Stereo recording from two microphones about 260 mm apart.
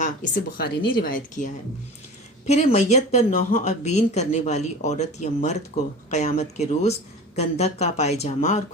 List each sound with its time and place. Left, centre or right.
0.0 s speech: left
2.5 s speech: left